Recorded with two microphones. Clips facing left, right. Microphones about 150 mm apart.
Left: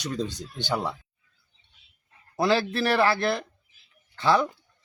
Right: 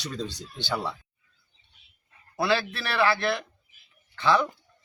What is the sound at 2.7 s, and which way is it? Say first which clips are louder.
Speech: left 3 dB; 40° left (ahead or behind).